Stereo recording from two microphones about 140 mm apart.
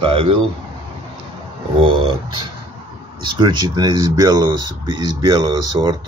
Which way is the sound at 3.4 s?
30° right (ahead or behind).